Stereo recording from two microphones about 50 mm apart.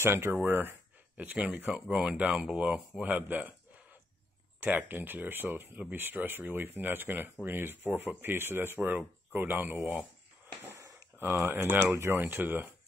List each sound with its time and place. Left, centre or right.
0.0 s speech: right
0.5 s speech: right
1.1 s speech: right
4.7 s speech: right
11.3 s speech: right
11.8 s speech: right
12.2 s speech: right